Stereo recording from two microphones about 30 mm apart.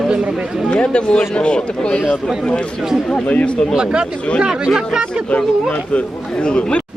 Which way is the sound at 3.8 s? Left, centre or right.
Right.